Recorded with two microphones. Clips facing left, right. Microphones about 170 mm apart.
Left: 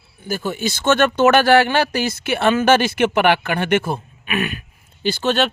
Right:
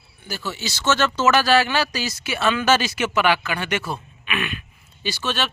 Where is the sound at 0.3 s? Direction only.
50° left (ahead or behind).